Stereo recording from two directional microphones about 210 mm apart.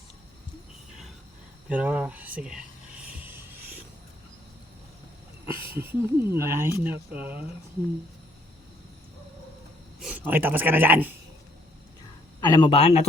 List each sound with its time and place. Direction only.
1.7 s speech: 5° right (ahead or behind)
3.0 s a sound: 5° right (ahead or behind)
5.5 s speech: 10° right (ahead or behind)
10.0 s speech: 5° right (ahead or behind)
12.4 s speech: 20° left (ahead or behind)